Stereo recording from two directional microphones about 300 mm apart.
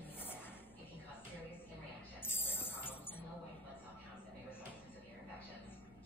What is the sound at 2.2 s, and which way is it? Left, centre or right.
Music, centre.